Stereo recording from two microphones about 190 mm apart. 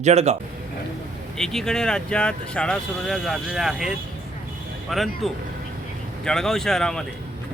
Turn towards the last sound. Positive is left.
turn(degrees=0)  # may be behind; listen again after turning